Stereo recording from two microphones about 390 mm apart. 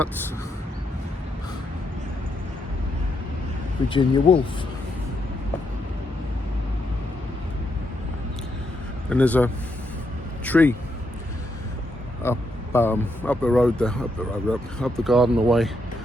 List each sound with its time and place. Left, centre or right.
3.8 s speech: centre
9.0 s speech: centre
12.2 s speech: centre